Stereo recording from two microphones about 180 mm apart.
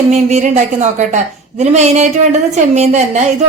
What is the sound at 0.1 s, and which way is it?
A woman's voice, 40° right (ahead or behind).